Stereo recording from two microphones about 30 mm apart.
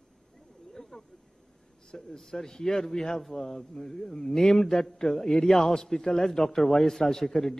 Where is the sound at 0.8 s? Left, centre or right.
Left.